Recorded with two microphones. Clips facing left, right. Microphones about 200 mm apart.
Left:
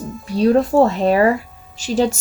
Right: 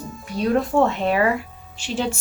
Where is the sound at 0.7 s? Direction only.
40° left (ahead or behind).